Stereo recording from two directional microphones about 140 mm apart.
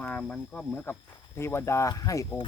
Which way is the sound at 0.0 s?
10° left (ahead or behind).